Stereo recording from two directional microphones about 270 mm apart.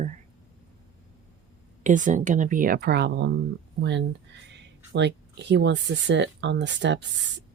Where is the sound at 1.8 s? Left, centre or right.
Right.